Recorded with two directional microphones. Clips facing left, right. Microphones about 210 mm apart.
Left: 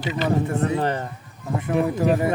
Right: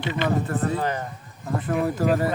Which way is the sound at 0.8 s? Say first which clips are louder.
Left 3 dB; 30° left (ahead or behind).